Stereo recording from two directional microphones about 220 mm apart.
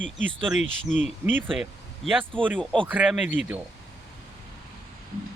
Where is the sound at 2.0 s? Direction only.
Centre (ahead or behind).